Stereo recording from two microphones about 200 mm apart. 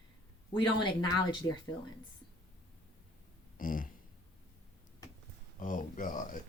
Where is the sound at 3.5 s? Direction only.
45° left (ahead or behind).